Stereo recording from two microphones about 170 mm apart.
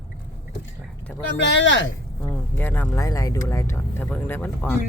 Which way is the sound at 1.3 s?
90° left.